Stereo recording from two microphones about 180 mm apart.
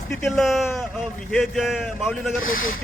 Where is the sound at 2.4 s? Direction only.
50° left (ahead or behind).